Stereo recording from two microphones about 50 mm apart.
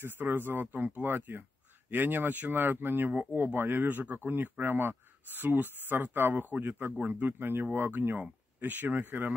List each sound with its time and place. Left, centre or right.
0.0 s speech: right
3.8 s speech: right